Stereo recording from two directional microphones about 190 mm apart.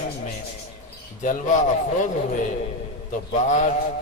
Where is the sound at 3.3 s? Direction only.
40° left (ahead or behind).